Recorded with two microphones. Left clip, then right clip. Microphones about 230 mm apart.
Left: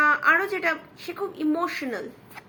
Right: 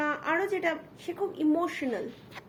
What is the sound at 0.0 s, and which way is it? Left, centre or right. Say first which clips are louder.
A woman's voice: left 9 dB; centre.